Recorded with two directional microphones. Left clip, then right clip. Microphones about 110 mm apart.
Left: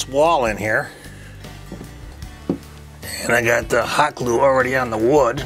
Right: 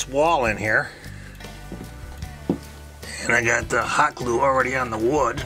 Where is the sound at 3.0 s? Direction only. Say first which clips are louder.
Left 3 dB; 20° left (ahead or behind).